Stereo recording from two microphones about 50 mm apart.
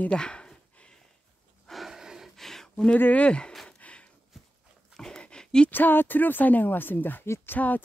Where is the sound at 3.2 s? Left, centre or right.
Centre.